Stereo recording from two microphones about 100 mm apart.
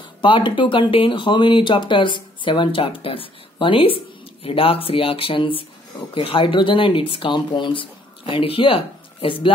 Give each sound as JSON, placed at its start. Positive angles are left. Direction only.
{"t": 0.2, "sound": "speech", "side_deg": 55}